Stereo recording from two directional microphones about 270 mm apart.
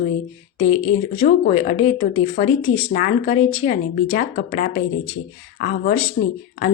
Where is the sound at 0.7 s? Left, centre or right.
Left.